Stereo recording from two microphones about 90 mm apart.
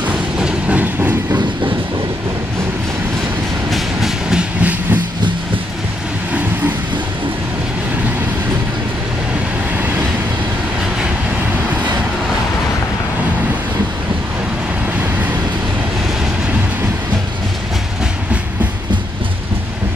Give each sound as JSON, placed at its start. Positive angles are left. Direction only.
{"t": 0.0, "sound": "train", "side_deg": -10}
{"t": 3.7, "sound": "train", "side_deg": -5}